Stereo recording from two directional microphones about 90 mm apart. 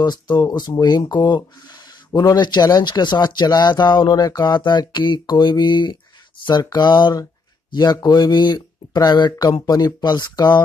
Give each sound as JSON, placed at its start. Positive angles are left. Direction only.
{"t": 0.0, "sound": "speech", "side_deg": 50}